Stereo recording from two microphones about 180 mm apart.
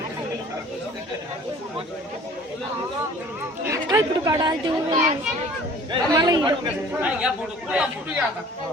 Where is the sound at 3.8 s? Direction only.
20° right (ahead or behind).